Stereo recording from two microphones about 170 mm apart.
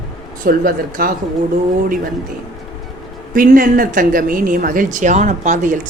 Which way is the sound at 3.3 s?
55° right (ahead or behind).